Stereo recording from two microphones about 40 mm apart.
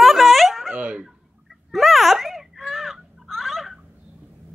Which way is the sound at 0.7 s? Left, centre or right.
Right.